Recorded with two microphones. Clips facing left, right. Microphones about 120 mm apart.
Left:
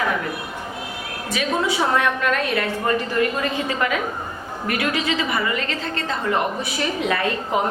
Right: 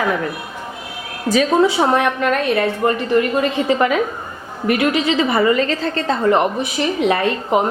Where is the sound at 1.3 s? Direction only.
30° right (ahead or behind).